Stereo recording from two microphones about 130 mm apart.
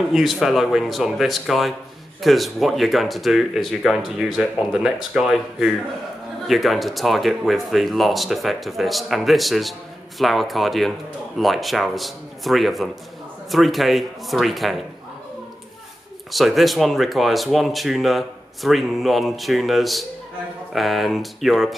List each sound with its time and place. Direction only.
0.1 s speech: centre (ahead or behind)
16.3 s speech: centre (ahead or behind)